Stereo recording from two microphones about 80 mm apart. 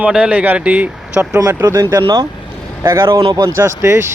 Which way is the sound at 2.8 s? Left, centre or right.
Right.